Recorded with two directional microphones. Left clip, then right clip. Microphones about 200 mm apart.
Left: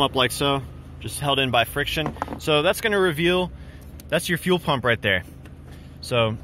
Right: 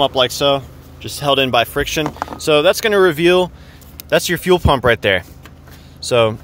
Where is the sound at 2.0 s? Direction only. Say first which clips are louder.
Right 6 dB; 5° right (ahead or behind).